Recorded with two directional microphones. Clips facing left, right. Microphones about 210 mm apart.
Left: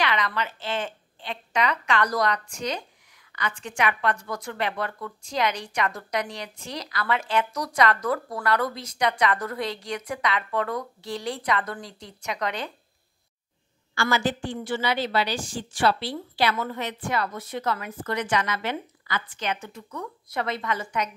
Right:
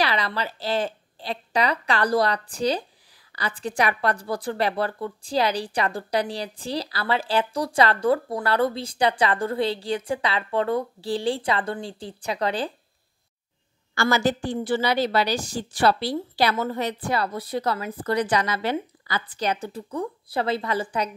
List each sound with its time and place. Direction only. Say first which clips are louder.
0.0 s a woman's voice: right 1 dB; 35° right (ahead or behind)
13.9 s a woman's voice: right 3 dB; 40° right (ahead or behind)